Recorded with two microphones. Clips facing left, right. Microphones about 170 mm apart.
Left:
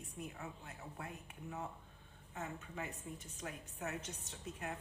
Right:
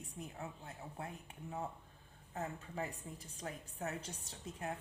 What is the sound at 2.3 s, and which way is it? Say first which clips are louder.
A woman's voice: right 3 dB; 35° right (ahead or behind).